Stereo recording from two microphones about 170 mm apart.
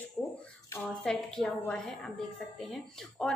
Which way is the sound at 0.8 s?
5° left (ahead or behind).